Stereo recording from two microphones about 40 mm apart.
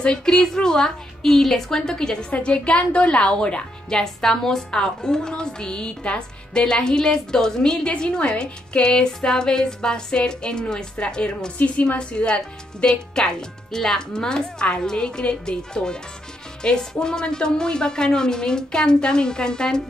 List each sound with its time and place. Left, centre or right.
0.0 s a woman's voice: centre
2.4 s speech: left
4.0 s a woman's voice: centre
11.5 s a woman's voice: left; by 19.8 s centre